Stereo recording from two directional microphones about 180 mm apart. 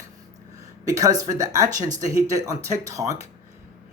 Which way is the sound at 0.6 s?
20° right (ahead or behind).